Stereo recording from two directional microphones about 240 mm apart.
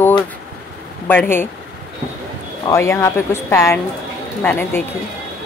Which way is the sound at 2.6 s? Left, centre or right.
Centre.